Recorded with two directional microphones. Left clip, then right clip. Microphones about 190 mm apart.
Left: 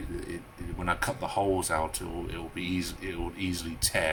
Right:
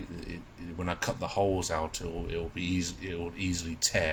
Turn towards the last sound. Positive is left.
turn(degrees=-15)  # may be behind; listen again after turning